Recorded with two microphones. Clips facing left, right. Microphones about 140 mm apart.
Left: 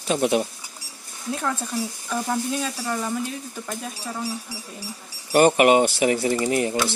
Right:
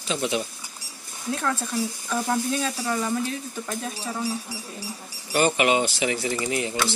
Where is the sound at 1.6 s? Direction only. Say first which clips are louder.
Right 1 dB; 5° left (ahead or behind).